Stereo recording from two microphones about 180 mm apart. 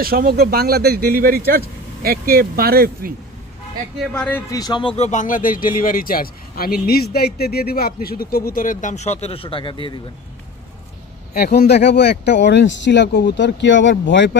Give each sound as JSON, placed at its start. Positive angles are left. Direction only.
{"t": 0.0, "sound": "speech", "side_deg": -55}
{"t": 4.1, "sound": "speech", "side_deg": 5}
{"t": 4.5, "sound": "speech", "side_deg": 20}
{"t": 11.3, "sound": "speech", "side_deg": 60}